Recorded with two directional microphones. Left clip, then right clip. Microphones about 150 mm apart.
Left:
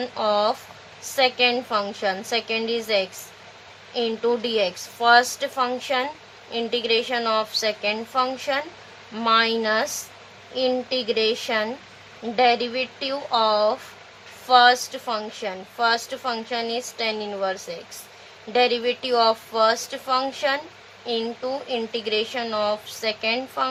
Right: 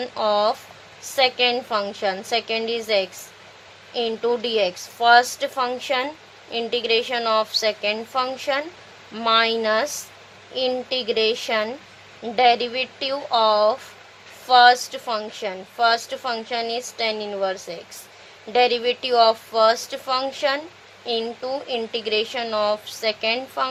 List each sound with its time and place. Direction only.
0.0 s a woman's voice: 25° right (ahead or behind)